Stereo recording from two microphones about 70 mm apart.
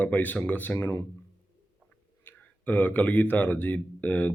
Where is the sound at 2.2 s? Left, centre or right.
Left.